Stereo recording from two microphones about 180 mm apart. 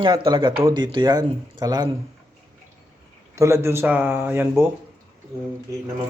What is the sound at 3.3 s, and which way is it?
Speech, 15° right (ahead or behind).